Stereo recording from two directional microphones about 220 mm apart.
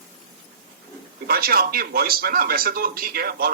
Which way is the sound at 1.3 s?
45° right (ahead or behind).